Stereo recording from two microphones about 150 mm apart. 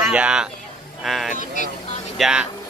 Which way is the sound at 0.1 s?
5° right (ahead or behind).